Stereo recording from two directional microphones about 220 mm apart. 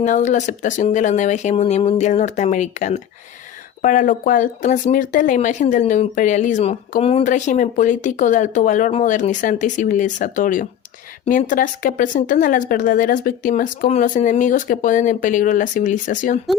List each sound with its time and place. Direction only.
0.0 s speech: 35° left (ahead or behind)